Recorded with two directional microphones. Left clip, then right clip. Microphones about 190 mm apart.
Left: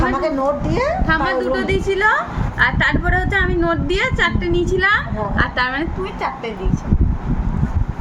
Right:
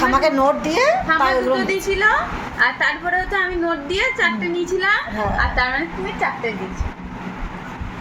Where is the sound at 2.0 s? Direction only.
30° left (ahead or behind).